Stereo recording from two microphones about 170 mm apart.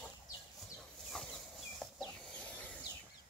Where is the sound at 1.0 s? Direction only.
Centre (ahead or behind).